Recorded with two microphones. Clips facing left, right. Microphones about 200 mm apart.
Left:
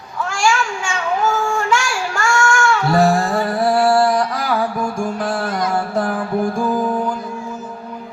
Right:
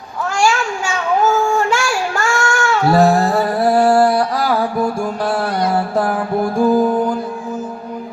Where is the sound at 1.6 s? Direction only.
35° right (ahead or behind).